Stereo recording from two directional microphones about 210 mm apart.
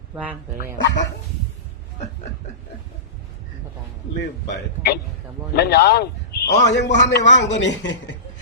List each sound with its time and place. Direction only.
0.2 s speech: 10° right (ahead or behind)
4.2 s a man's voice: 50° left (ahead or behind)